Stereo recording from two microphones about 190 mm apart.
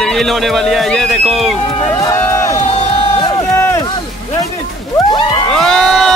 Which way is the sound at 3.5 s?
10° left (ahead or behind).